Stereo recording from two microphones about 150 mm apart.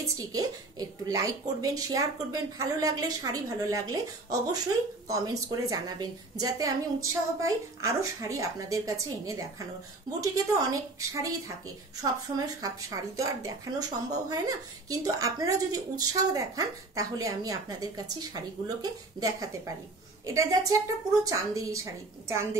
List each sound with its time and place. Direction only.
0.3 s a woman's voice: 25° right (ahead or behind)